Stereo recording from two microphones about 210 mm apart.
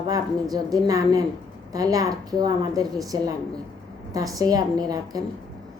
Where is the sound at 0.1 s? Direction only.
15° right (ahead or behind).